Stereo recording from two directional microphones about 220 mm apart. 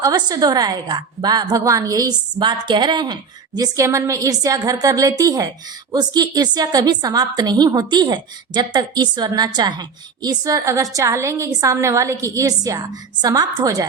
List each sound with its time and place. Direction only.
0.0 s a woman's voice: 20° right (ahead or behind)